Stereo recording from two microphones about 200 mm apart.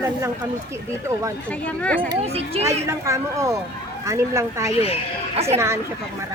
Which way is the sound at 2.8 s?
15° right (ahead or behind).